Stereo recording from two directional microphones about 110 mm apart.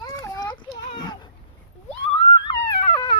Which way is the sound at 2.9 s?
45° left (ahead or behind).